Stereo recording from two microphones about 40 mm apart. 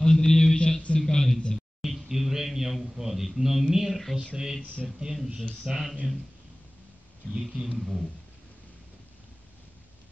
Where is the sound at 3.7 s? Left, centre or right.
Centre.